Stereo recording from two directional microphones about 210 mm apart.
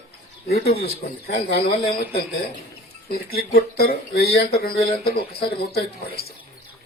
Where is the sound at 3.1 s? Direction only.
45° left (ahead or behind).